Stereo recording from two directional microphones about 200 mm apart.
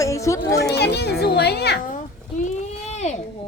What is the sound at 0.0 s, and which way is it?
Chatter, 15° left (ahead or behind).